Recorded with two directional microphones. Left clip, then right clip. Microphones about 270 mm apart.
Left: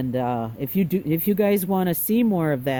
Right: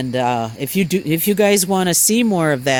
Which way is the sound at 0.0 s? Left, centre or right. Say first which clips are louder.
Right 7 dB; right.